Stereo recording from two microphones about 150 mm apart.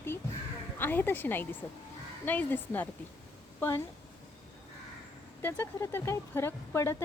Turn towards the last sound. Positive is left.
turn(degrees=20)  # may be behind; listen again after turning